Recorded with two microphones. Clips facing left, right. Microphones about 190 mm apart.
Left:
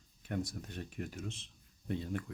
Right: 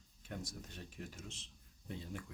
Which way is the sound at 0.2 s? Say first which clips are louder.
Left 8 dB; 60° left (ahead or behind).